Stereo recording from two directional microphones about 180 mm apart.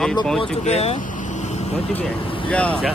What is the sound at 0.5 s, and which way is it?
Vehicle, 35° left (ahead or behind).